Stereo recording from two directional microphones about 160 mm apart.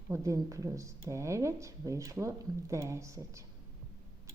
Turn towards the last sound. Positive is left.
turn(degrees=-20)  # may be behind; listen again after turning